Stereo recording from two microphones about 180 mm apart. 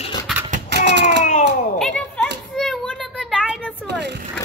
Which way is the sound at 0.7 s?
70° right (ahead or behind).